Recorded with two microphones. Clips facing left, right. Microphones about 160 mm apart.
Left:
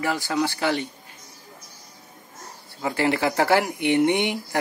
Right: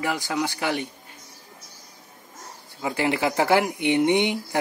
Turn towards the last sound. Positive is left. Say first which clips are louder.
# right 1 dB
turn(degrees=-20)  # may be behind; listen again after turning